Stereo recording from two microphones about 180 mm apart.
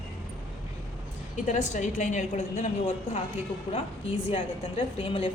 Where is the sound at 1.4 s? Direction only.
40° left (ahead or behind).